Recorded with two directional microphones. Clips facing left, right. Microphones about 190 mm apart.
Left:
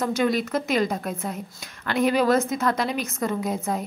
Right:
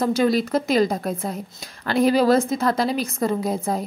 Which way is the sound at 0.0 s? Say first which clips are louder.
Right 4 dB; 35° right (ahead or behind).